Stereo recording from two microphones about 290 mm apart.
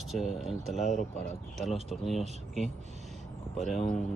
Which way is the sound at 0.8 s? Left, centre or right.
Left.